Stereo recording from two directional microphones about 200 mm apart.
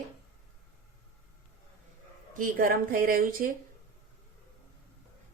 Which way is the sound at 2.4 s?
45° right (ahead or behind).